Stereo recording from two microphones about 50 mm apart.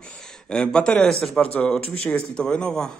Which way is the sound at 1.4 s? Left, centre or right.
Left.